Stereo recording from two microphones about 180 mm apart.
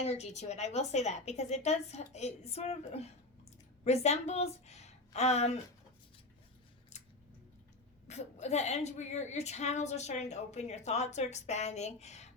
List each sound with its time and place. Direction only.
0.0 s a woman's voice: 35° left (ahead or behind)
6.9 s a sound: 40° left (ahead or behind)
8.0 s a woman's voice: 40° left (ahead or behind)